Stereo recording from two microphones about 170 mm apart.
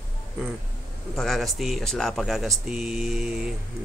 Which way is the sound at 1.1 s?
Centre (ahead or behind).